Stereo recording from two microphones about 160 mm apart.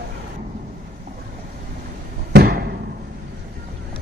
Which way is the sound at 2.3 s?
75° right (ahead or behind).